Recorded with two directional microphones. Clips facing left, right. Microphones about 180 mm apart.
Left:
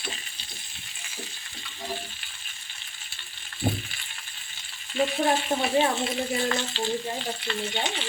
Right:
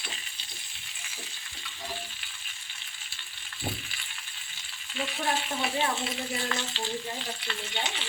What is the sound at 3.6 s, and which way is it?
Frying, 45° left (ahead or behind).